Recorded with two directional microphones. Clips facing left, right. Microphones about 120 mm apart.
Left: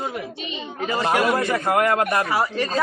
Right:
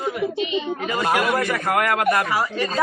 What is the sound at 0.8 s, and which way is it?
A man's voice, 30° left (ahead or behind).